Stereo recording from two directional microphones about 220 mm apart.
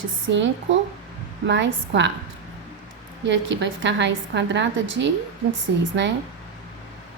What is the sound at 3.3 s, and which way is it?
A woman's voice, 55° right (ahead or behind).